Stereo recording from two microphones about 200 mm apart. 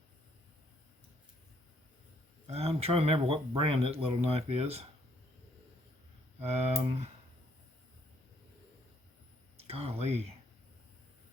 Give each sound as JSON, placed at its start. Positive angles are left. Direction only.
{"t": 2.5, "sound": "speech", "side_deg": -30}
{"t": 6.4, "sound": "speech", "side_deg": -30}
{"t": 9.6, "sound": "speech", "side_deg": -30}